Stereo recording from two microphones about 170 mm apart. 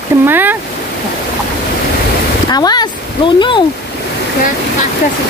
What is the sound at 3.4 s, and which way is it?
Speech, 25° left (ahead or behind).